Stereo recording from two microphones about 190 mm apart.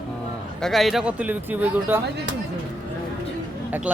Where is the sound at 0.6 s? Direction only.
Centre (ahead or behind).